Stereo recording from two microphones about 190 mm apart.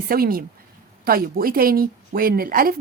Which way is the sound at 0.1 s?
50° right (ahead or behind).